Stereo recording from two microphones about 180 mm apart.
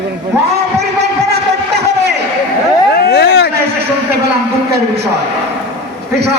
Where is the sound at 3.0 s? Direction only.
65° left (ahead or behind).